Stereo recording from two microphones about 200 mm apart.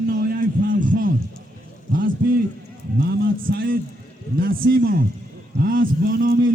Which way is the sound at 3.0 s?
55° right (ahead or behind).